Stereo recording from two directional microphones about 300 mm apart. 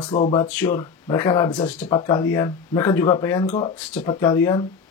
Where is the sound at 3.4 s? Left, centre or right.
Left.